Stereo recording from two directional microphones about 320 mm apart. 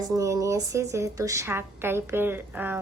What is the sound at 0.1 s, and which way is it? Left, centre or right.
Speech, centre.